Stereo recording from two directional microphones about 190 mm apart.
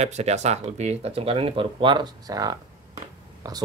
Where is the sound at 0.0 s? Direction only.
35° right (ahead or behind).